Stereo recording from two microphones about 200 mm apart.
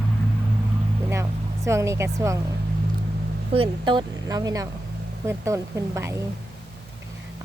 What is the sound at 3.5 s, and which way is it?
A woman's voice, 25° right (ahead or behind).